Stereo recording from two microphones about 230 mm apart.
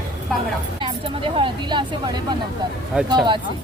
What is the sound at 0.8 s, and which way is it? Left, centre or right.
Vehicle, right.